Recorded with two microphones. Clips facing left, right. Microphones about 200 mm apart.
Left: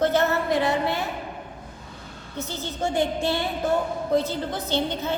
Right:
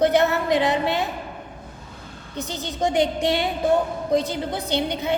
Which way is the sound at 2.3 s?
15° right (ahead or behind).